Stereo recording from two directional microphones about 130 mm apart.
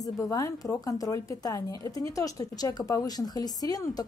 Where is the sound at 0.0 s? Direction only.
25° left (ahead or behind).